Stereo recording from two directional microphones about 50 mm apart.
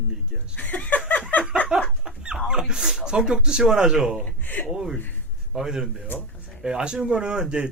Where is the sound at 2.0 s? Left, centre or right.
Centre.